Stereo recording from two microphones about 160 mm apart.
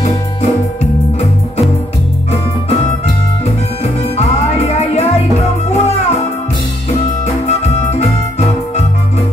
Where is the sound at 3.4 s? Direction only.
40° left (ahead or behind).